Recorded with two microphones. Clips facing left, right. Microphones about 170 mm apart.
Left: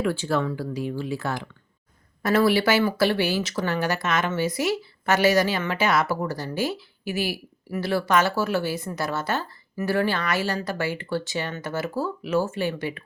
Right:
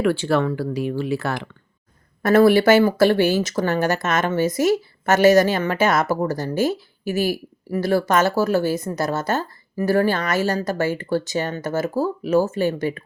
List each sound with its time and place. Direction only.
0.0 s speech: 70° right (ahead or behind)
2.2 s speech: 50° right (ahead or behind)